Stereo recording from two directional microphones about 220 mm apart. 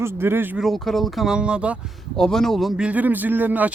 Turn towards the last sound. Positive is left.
turn(degrees=-10)  # may be behind; listen again after turning